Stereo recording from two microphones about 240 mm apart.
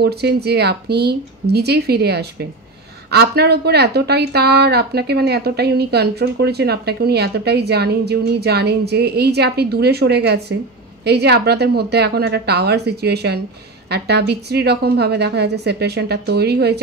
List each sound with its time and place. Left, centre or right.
0.0 s speech: right